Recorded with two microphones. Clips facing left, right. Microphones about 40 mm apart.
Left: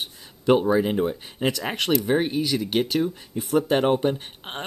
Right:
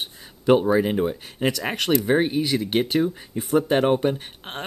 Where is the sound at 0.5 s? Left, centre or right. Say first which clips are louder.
Right 1 dB; centre.